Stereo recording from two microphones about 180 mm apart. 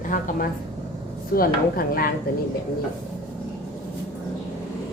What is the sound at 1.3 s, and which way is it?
Speech, 55° left (ahead or behind).